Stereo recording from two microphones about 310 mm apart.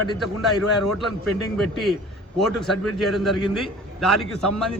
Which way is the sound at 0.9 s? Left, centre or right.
Centre.